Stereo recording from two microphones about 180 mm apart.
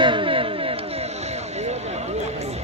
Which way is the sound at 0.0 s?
25° right (ahead or behind).